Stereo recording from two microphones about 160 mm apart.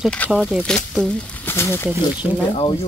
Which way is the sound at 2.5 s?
30° left (ahead or behind).